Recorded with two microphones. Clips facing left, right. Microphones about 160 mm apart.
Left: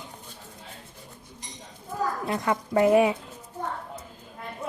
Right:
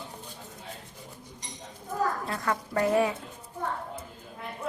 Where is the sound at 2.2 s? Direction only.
15° left (ahead or behind).